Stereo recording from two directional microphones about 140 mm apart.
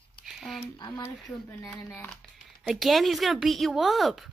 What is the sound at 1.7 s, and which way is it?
Speech, 15° left (ahead or behind).